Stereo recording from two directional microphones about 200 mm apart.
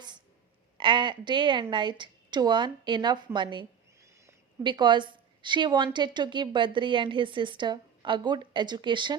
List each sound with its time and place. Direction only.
0.8 s a woman's voice: 25° right (ahead or behind)